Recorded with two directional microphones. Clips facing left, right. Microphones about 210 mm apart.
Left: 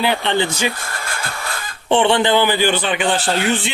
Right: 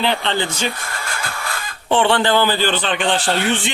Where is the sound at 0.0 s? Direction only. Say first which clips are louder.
Left 2 dB; 10° left (ahead or behind).